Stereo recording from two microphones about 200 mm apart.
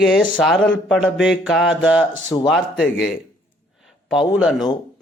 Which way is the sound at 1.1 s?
65° left (ahead or behind).